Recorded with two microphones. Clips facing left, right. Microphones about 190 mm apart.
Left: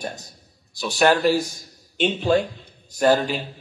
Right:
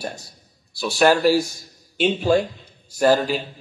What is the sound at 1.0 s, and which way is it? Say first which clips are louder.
A man's voice: right 2 dB; 10° right (ahead or behind).